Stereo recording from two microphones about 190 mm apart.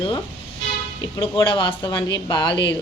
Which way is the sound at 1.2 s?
25° left (ahead or behind).